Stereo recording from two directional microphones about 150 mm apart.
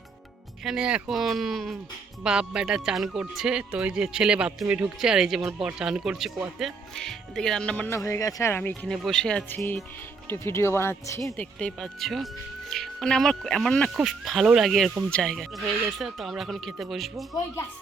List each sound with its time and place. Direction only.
0.6 s speech: 5° right (ahead or behind); by 8.9 s 15° left (ahead or behind)
8.9 s speech: 5° left (ahead or behind)